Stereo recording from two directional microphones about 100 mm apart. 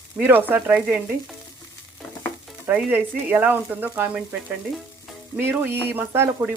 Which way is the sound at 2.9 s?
20° right (ahead or behind).